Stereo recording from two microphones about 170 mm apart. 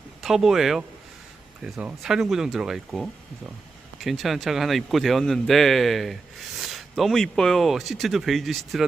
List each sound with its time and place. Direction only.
0.2 s speech: centre (ahead or behind)